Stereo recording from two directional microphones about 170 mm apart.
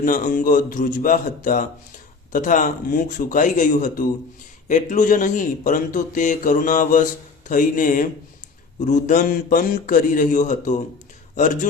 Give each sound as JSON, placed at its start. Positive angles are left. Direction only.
{"t": 0.0, "sound": "a man's voice", "side_deg": 50}